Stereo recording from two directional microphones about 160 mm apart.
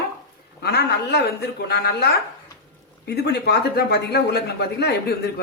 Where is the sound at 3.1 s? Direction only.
90° left.